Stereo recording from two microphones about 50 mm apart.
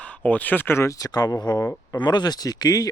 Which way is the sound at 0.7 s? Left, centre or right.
Left.